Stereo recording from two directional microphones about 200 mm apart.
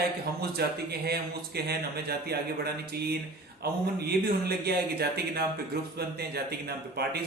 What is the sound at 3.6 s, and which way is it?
A man's voice, 50° right (ahead or behind).